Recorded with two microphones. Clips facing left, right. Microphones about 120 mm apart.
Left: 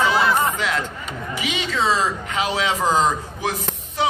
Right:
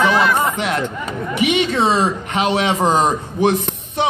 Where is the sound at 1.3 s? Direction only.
60° right (ahead or behind).